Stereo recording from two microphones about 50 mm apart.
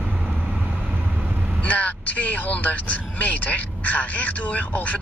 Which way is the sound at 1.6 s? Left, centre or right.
Left.